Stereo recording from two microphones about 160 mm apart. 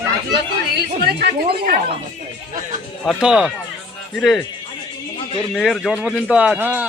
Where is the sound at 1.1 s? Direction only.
75° right (ahead or behind).